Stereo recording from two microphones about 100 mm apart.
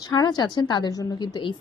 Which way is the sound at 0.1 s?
45° left (ahead or behind).